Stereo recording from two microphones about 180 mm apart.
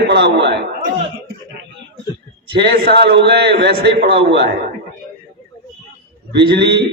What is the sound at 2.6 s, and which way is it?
A man's voice, 65° right (ahead or behind).